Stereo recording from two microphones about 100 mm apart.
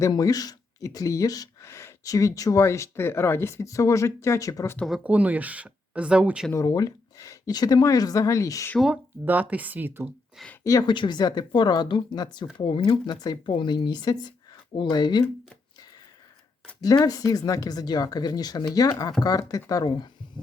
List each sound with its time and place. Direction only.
0.0 s speech: 35° left (ahead or behind)
5.0 s speech: 15° right (ahead or behind)
6.5 s speech: 35° left (ahead or behind)
9.2 s speech: 15° right (ahead or behind)
10.6 s speech: 35° left (ahead or behind)
10.8 s speech: 50° left (ahead or behind)
16.8 s speech: 40° left (ahead or behind)